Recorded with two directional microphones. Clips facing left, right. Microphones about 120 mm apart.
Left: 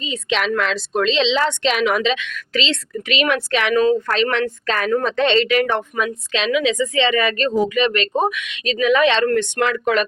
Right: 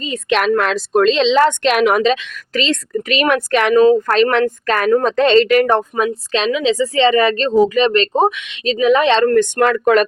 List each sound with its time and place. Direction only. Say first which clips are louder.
0.0 s a woman's voice: right 5 dB; 50° right (ahead or behind)